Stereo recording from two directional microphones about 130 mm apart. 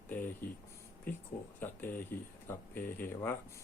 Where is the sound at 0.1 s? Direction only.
15° left (ahead or behind).